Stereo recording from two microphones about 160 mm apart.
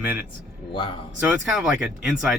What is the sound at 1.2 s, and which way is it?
Speech, 5° right (ahead or behind).